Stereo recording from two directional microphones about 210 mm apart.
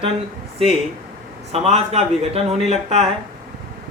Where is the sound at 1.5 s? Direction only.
30° right (ahead or behind).